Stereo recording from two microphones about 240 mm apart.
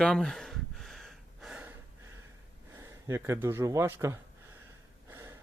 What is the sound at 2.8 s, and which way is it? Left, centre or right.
Speech, centre.